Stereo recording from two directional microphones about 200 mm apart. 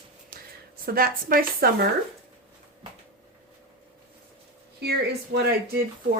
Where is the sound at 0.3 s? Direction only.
45° right (ahead or behind).